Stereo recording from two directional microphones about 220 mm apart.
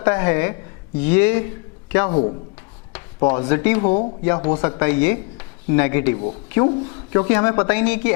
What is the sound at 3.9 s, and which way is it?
Speech, 30° left (ahead or behind).